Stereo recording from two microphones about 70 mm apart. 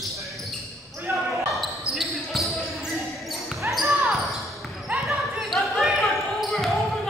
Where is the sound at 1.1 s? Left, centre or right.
Right.